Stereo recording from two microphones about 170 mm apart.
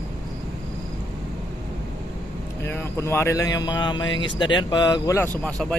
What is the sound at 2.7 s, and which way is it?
Speech, 15° left (ahead or behind).